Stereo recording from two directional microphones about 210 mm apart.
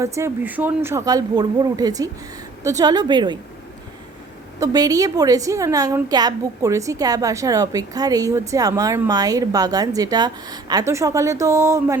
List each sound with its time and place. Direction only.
0.0 s a woman's voice: 15° right (ahead or behind)
4.6 s a woman's voice: 15° right (ahead or behind)